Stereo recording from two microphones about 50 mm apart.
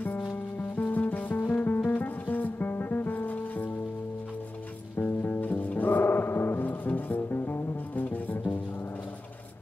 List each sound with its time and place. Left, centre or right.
0.0 s music: left
4.9 s music: left